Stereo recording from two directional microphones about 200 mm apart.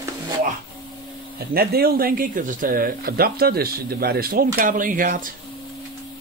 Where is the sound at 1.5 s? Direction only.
50° right (ahead or behind).